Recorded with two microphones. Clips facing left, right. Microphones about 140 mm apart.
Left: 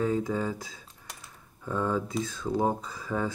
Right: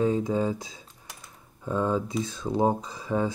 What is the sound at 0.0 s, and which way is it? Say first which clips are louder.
Speech: right 3 dB; 20° right (ahead or behind).